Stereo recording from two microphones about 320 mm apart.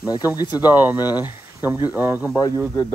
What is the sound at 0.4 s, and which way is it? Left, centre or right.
Speech, centre.